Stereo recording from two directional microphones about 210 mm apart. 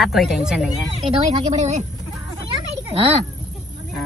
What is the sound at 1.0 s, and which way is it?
Speech, 30° right (ahead or behind).